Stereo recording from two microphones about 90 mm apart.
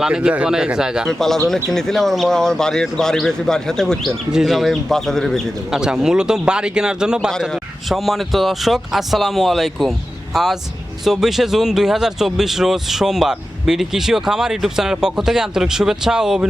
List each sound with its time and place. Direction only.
0.0 s speech: 10° right (ahead or behind)
1.0 s speech: 5° left (ahead or behind)
4.3 s speech: 5° right (ahead or behind)
5.7 s speech: 5° right (ahead or behind)